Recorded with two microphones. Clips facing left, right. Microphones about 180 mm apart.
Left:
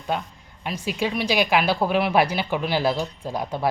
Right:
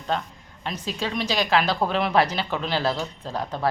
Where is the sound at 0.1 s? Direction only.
10° left (ahead or behind).